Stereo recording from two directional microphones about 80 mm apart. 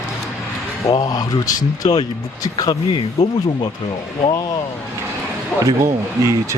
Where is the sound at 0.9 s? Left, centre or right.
Left.